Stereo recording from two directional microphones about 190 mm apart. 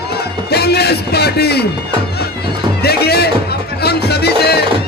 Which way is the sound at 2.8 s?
55° left (ahead or behind).